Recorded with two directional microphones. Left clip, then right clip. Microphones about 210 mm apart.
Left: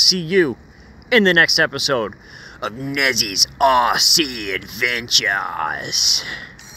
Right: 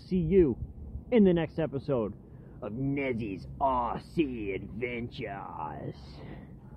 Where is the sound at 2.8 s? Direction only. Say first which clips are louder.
Left 14 dB; 50° left (ahead or behind).